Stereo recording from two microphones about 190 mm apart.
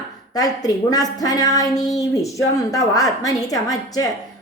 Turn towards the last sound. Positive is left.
turn(degrees=20)  # may be behind; listen again after turning